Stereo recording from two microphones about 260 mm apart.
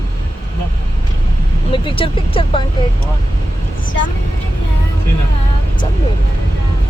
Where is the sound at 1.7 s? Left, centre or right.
Centre.